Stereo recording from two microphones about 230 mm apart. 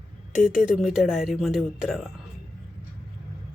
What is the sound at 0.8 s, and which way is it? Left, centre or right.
Speech, centre.